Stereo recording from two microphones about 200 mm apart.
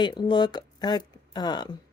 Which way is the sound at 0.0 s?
20° left (ahead or behind).